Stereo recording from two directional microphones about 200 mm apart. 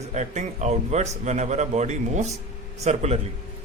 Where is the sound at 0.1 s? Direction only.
35° right (ahead or behind).